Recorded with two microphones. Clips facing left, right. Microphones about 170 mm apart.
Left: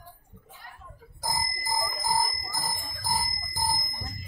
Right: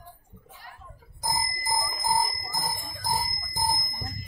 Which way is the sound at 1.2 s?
20° right (ahead or behind).